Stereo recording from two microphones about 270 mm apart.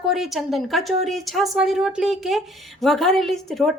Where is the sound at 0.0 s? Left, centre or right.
Centre.